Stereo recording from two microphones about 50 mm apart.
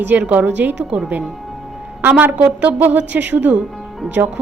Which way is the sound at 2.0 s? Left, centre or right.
Right.